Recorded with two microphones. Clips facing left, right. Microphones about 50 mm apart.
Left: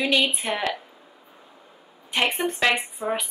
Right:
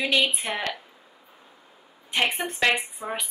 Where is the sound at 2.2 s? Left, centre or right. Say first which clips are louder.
Left 3 dB; left.